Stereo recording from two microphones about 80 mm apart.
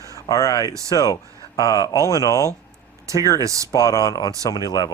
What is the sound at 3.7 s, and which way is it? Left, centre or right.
Speech, left.